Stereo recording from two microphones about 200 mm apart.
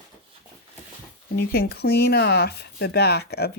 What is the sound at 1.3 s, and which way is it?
Speech, 55° left (ahead or behind).